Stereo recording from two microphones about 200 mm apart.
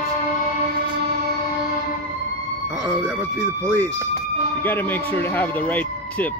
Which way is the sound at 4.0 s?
10° left (ahead or behind).